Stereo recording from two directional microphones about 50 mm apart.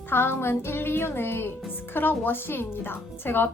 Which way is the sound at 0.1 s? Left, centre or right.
Left.